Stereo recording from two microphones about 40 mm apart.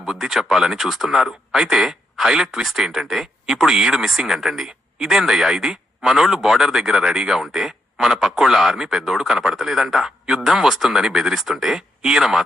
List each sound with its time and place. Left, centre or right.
0.0 s a man's voice: centre